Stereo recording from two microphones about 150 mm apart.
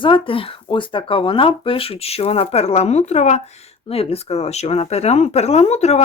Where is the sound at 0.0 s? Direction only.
35° left (ahead or behind).